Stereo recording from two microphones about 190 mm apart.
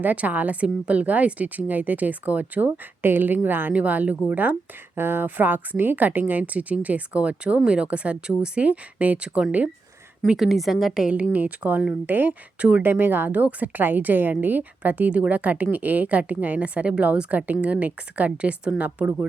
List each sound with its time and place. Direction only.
0.0 s a woman's voice: 10° right (ahead or behind)